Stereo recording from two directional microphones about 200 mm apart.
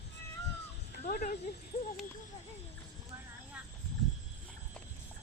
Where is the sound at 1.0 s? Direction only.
35° left (ahead or behind).